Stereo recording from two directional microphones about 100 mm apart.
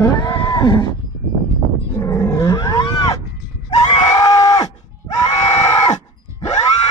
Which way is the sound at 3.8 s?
45° left (ahead or behind).